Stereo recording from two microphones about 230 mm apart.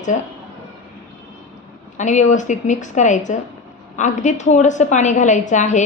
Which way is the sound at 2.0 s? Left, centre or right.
Left.